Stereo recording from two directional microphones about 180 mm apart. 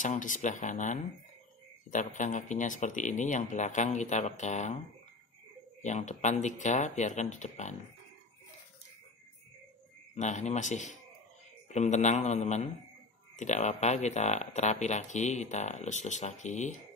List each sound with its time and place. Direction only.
0.0 s speech: 45° left (ahead or behind)
5.8 s speech: 40° left (ahead or behind)
10.1 s speech: 40° left (ahead or behind)